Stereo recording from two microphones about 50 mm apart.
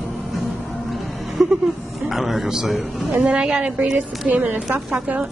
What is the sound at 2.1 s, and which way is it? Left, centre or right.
A man's voice, centre.